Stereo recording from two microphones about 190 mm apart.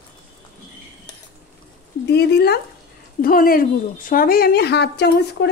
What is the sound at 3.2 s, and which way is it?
A woman's voice, 50° left (ahead or behind).